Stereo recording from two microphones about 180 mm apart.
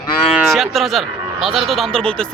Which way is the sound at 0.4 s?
Centre (ahead or behind).